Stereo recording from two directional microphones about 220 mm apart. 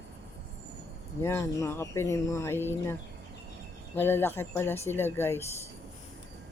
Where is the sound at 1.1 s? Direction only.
10° left (ahead or behind).